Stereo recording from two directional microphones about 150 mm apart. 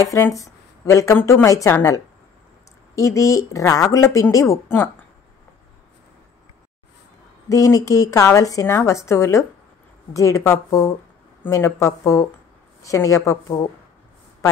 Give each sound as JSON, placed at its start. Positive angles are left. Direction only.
{"t": 0.0, "sound": "a woman's voice", "side_deg": 20}
{"t": 3.0, "sound": "a woman's voice", "side_deg": 20}
{"t": 7.4, "sound": "a woman's voice", "side_deg": 20}